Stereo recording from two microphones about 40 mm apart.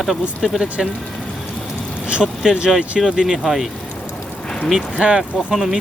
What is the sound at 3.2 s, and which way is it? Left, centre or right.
Speech, centre.